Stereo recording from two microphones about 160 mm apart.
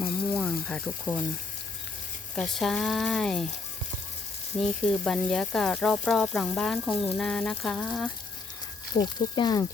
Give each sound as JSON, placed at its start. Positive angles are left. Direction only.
{"t": 0.0, "sound": "a sound", "side_deg": 5}
{"t": 2.3, "sound": "speech", "side_deg": 0}
{"t": 4.6, "sound": "speech", "side_deg": 5}
{"t": 8.9, "sound": "speech", "side_deg": 25}